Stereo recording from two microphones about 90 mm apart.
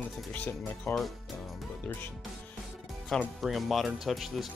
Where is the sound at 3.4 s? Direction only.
Centre (ahead or behind).